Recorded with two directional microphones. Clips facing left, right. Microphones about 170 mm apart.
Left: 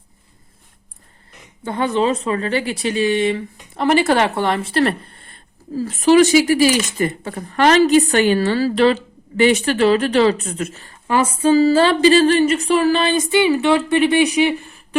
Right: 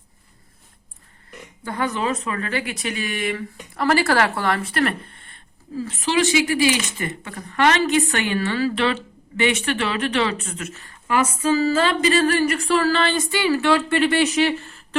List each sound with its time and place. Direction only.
1.6 s speech: 25° left (ahead or behind)